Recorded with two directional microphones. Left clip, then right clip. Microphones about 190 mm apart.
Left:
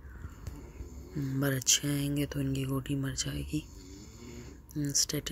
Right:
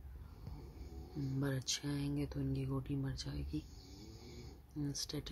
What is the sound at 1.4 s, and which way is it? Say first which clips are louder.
Speech: left 12 dB; 15° left (ahead or behind).